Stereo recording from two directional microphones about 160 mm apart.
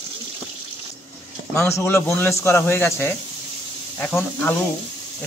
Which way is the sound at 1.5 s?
15° left (ahead or behind).